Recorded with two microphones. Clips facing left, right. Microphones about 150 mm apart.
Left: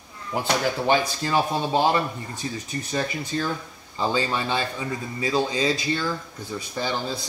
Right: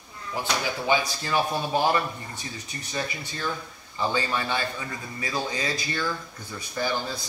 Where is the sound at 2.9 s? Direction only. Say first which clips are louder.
Left 5 dB; 40° left (ahead or behind).